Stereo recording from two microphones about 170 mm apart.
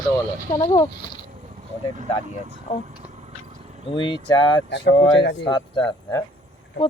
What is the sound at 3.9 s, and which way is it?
Speech, 30° left (ahead or behind).